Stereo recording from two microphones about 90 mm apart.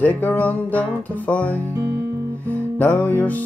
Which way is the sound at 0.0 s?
20° left (ahead or behind).